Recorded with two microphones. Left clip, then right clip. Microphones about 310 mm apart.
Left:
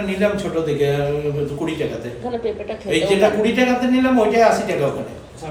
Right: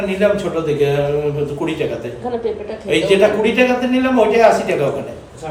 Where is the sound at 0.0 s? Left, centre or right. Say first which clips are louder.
Right 4 dB; centre.